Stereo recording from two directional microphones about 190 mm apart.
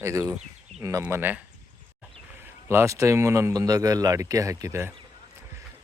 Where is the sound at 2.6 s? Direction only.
15° right (ahead or behind).